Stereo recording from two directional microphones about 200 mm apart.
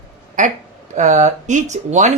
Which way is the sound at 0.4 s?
40° right (ahead or behind).